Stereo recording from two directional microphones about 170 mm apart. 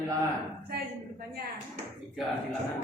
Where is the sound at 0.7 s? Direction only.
65° right (ahead or behind).